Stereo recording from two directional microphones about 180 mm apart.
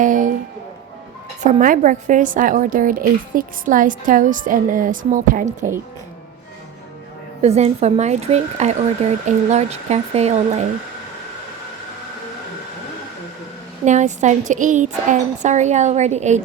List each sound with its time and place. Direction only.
0.0 s a sound: 45° right (ahead or behind)
1.5 s a woman's voice: 45° right (ahead or behind)
7.4 s a woman's voice: 35° right (ahead or behind)
13.8 s a woman's voice: 40° right (ahead or behind)